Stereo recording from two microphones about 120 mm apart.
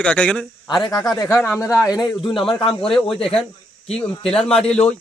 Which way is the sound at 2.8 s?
Centre (ahead or behind).